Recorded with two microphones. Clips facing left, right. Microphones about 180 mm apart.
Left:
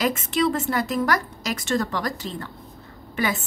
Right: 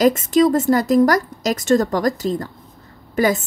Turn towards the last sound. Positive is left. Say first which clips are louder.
# right 8 dB
turn(degrees=-40)  # may be behind; listen again after turning